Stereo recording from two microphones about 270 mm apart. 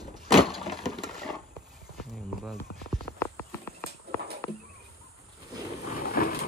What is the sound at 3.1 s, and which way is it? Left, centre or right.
Cricket, centre.